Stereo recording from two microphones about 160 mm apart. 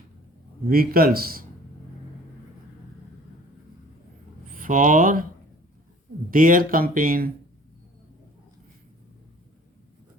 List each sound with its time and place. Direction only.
0.7 s speech: 70° right (ahead or behind)
4.5 s speech: 55° right (ahead or behind)
6.3 s speech: 60° right (ahead or behind)